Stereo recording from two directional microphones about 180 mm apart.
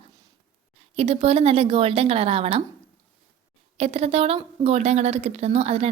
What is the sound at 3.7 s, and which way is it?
A woman's voice, 35° right (ahead or behind).